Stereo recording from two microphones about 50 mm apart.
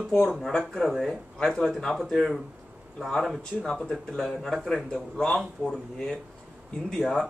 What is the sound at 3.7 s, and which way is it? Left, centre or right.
A man's voice, centre.